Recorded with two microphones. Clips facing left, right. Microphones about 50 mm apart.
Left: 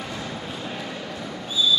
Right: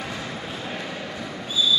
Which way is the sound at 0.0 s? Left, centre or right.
Centre.